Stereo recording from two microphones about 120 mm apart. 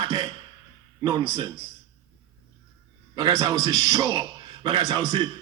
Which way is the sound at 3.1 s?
30° right (ahead or behind).